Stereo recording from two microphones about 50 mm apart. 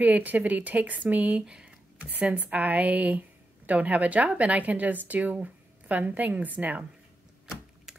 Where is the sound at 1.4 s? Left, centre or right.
Right.